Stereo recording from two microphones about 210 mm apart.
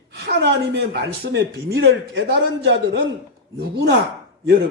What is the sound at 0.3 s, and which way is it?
A man's voice, 55° right (ahead or behind).